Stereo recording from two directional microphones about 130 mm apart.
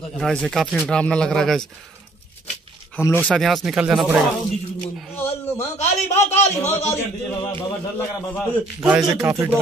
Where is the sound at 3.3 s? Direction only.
Centre (ahead or behind).